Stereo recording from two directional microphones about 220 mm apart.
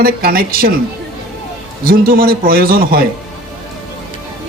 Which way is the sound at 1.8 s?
40° right (ahead or behind).